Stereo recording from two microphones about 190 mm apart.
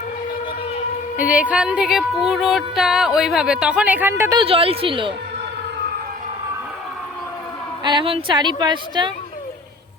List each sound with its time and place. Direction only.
1.1 s music: 10° right (ahead or behind)
4.4 s a woman's voice: 30° right (ahead or behind)
7.9 s a woman's voice: 25° right (ahead or behind)